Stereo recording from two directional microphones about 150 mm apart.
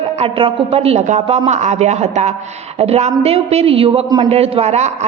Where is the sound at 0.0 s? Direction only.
40° right (ahead or behind).